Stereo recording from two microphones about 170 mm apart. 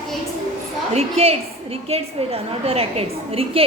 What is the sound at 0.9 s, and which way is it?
A woman's voice, 35° right (ahead or behind).